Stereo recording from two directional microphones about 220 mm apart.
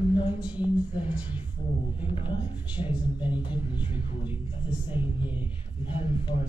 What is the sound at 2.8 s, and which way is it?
Speech, 5° right (ahead or behind).